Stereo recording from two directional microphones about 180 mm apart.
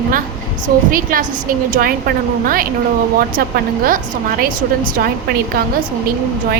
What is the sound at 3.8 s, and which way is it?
A woman's voice, 55° right (ahead or behind).